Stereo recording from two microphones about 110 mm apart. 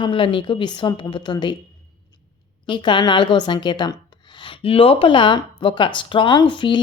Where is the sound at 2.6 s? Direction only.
45° left (ahead or behind).